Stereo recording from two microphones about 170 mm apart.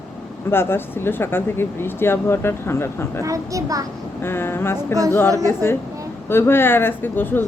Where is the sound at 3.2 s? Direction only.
20° right (ahead or behind).